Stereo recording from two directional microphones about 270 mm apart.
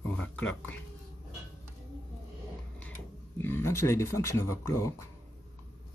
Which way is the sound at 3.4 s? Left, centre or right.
Centre.